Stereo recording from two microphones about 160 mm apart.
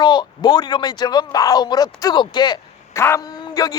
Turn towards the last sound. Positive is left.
turn(degrees=20)  # may be behind; listen again after turning